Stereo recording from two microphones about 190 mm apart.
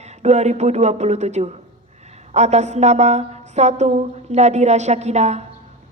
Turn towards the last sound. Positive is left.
turn(degrees=-35)  # may be behind; listen again after turning